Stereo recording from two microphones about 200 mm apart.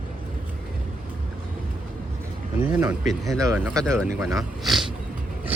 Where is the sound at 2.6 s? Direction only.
5° right (ahead or behind).